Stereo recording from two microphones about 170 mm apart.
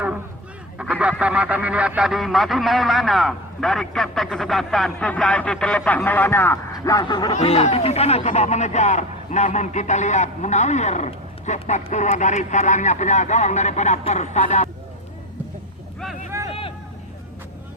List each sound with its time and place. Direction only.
0.8 s honk: 5° right (ahead or behind); by 7.3 s 25° left (ahead or behind)
7.3 s speech: 35° left (ahead or behind)
16.5 s vehicle: 35° left (ahead or behind)